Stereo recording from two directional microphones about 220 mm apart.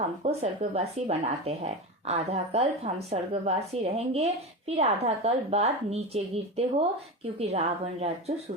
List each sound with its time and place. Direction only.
0.2 s speech: 30° right (ahead or behind)